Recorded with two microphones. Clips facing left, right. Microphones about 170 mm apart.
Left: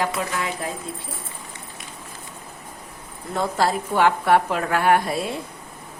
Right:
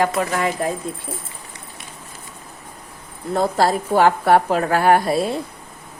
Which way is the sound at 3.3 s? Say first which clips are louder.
Right 4 dB; 40° right (ahead or behind).